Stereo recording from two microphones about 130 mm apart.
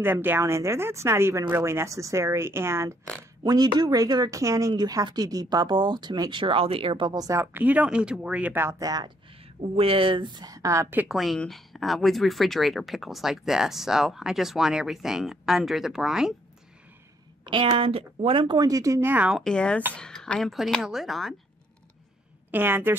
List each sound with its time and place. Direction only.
0.0 s speech: 15° right (ahead or behind)
3.4 s speech: 30° right (ahead or behind)
7.5 s speech: 10° right (ahead or behind); by 9.1 s 30° right (ahead or behind)
9.6 s speech: 45° right (ahead or behind); by 11.1 s 20° right (ahead or behind)
11.1 s speech: centre (ahead or behind)
17.5 s speech: 40° right (ahead or behind); by 19.3 s 15° right (ahead or behind)
19.3 s speech: 5° left (ahead or behind)
22.5 s speech: 15° right (ahead or behind)